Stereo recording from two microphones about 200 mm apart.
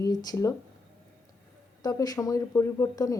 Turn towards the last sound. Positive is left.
turn(degrees=15)  # may be behind; listen again after turning